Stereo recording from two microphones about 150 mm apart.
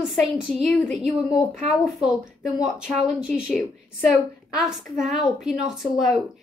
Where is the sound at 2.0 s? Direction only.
5° right (ahead or behind).